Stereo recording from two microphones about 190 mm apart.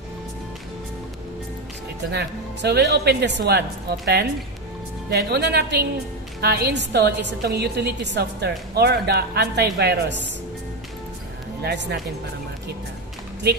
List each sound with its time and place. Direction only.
2.0 s a woman's voice: 60° right (ahead or behind)
11.6 s a woman's voice: 65° right (ahead or behind)